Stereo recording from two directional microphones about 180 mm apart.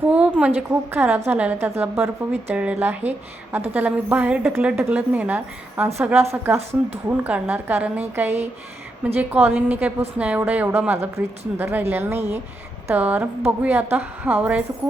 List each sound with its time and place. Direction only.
0.1 s a woman's voice: 5° right (ahead or behind)
6.6 s speech: 35° right (ahead or behind)
7.1 s a woman's voice: 10° right (ahead or behind)